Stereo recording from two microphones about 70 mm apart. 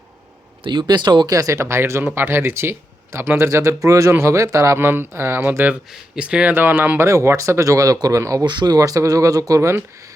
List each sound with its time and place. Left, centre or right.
0.7 s speech: right
1.3 s speech: right
4.9 s speech: right
6.1 s speech: centre; by 7.1 s right
7.1 s speech: right
8.4 s speech: right
9.6 s speech: right